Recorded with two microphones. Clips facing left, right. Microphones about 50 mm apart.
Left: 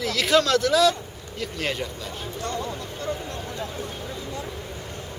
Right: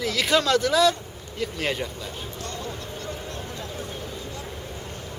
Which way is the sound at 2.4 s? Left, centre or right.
Left.